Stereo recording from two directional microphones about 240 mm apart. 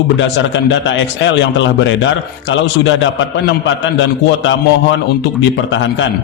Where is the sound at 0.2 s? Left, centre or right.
Left.